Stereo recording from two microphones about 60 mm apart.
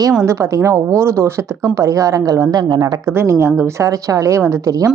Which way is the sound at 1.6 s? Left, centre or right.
Right.